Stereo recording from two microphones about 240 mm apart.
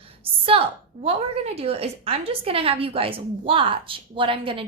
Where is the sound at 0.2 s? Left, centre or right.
Right.